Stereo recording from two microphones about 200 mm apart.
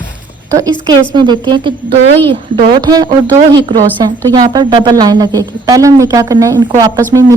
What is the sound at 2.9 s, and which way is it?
Speech, 20° right (ahead or behind).